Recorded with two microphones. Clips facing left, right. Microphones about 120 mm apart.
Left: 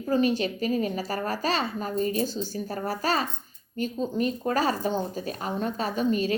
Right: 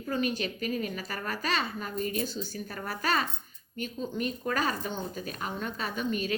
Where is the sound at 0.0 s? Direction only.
35° left (ahead or behind).